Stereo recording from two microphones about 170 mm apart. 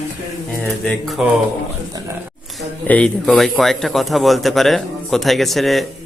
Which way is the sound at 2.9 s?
5° left (ahead or behind).